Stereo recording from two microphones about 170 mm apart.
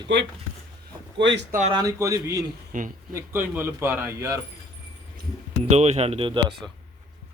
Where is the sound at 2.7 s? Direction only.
50° right (ahead or behind).